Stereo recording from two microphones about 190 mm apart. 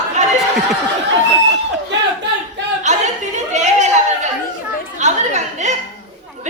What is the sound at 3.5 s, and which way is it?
Chatter, 40° right (ahead or behind).